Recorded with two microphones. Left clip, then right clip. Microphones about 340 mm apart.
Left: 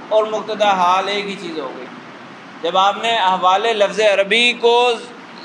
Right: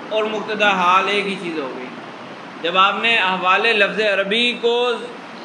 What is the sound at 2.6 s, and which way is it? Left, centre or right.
A man's voice, centre.